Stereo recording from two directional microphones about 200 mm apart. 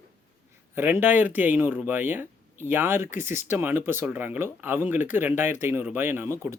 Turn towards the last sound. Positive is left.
turn(degrees=-10)  # may be behind; listen again after turning